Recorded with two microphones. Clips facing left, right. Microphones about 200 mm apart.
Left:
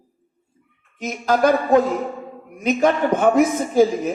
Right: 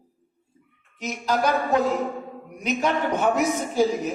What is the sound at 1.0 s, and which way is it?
Music, 50° left (ahead or behind).